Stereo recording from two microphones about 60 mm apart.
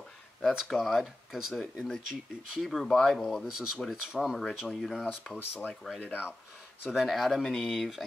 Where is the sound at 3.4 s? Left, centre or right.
Centre.